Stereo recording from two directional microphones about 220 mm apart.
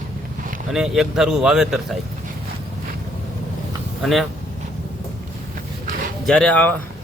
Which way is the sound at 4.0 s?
Centre (ahead or behind).